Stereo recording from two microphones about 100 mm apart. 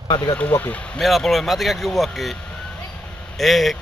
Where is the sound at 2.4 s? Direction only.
15° left (ahead or behind).